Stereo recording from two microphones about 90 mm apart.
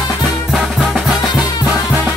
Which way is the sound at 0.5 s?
Centre (ahead or behind).